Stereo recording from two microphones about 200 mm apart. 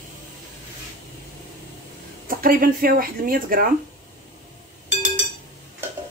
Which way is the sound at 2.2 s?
45° right (ahead or behind).